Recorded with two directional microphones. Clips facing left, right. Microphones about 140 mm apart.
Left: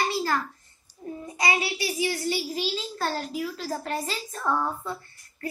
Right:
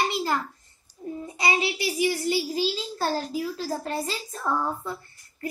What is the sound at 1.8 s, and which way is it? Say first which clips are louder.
A child's voice: right 2 dB; 20° right (ahead or behind).